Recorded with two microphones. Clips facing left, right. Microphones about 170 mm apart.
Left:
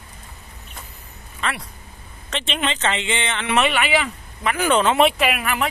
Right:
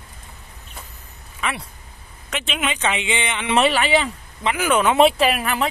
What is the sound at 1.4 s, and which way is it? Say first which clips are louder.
Speech: even; 10° right (ahead or behind).